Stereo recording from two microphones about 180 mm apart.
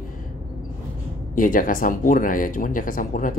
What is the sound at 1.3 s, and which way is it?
Speech, 50° left (ahead or behind).